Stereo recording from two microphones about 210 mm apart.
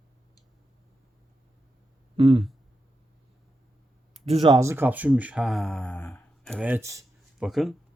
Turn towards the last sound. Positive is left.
turn(degrees=0)  # may be behind; listen again after turning